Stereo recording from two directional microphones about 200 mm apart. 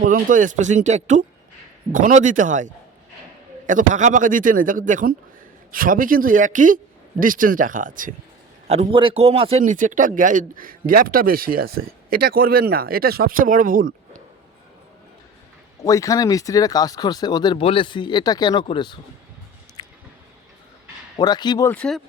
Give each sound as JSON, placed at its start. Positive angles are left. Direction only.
{"t": 0.1, "sound": "speech", "side_deg": -40}
{"t": 15.8, "sound": "speech", "side_deg": 15}
{"t": 19.8, "sound": "a sound", "side_deg": 20}
{"t": 21.2, "sound": "speech", "side_deg": 20}
{"t": 21.7, "sound": "speech", "side_deg": 5}